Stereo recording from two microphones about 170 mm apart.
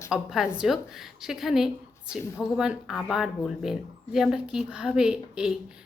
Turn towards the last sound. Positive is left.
turn(degrees=-5)  # may be behind; listen again after turning